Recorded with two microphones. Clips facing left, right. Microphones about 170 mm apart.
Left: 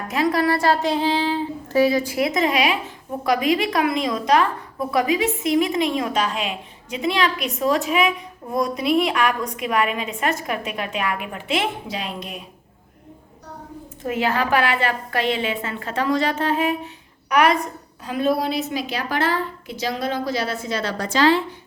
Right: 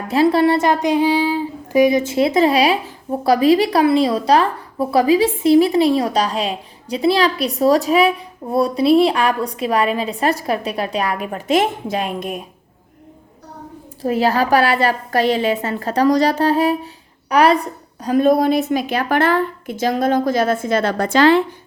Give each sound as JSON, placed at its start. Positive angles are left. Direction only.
{"t": 0.1, "sound": "speech", "side_deg": -30}
{"t": 14.0, "sound": "speech", "side_deg": -35}